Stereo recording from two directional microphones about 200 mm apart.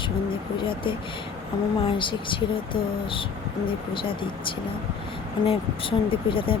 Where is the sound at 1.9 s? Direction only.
25° left (ahead or behind).